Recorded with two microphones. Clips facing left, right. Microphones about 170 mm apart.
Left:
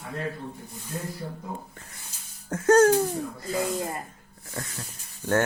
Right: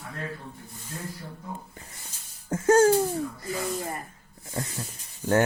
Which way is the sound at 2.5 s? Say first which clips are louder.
Left 1 dB; 10° right (ahead or behind).